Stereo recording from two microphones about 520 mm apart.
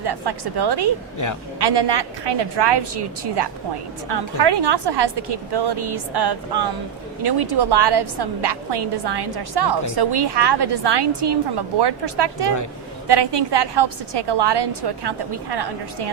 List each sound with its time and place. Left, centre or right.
0.0 s a woman's voice: right